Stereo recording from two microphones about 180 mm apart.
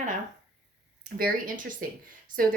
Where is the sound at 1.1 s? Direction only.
50° right (ahead or behind).